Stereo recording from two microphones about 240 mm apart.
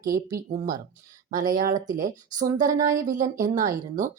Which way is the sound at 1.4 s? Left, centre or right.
Right.